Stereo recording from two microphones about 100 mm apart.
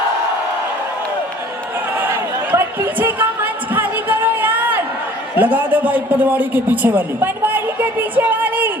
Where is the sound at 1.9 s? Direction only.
20° right (ahead or behind).